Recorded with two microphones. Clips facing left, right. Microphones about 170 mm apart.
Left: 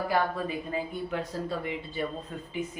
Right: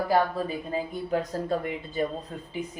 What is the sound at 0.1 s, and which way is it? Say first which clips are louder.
Speech: right 4 dB; 35° right (ahead or behind).